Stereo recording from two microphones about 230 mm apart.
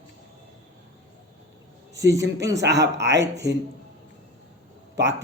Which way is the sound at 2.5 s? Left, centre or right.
Right.